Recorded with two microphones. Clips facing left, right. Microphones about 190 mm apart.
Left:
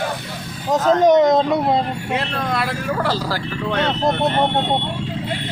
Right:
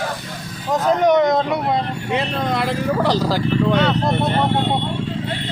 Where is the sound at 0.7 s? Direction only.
20° left (ahead or behind).